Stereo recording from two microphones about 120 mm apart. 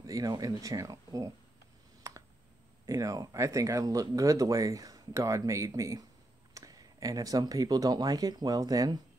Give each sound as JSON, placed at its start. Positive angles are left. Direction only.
{"t": 0.0, "sound": "speech", "side_deg": -30}
{"t": 2.9, "sound": "speech", "side_deg": -30}